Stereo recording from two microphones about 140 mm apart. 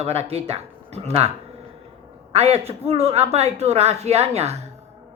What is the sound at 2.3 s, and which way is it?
Speech, 45° right (ahead or behind).